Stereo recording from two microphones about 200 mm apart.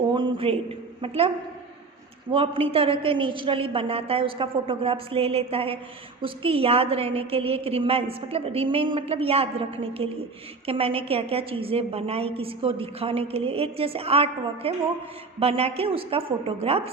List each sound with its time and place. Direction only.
0.1 s a sound: 25° right (ahead or behind)
1.0 s a woman's voice: 30° right (ahead or behind)
2.3 s a woman's voice: 25° right (ahead or behind)